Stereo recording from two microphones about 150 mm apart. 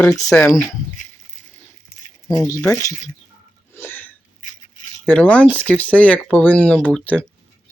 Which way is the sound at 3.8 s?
15° left (ahead or behind).